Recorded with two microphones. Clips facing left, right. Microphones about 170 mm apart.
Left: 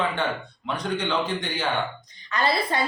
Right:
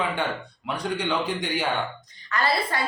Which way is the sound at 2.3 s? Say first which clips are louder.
Left 1 dB; 20° left (ahead or behind).